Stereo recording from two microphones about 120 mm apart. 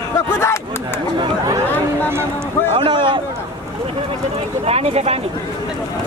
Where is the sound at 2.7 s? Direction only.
45° right (ahead or behind).